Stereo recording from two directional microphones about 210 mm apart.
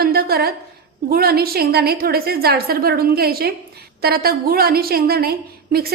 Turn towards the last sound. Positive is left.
turn(degrees=-45)  # may be behind; listen again after turning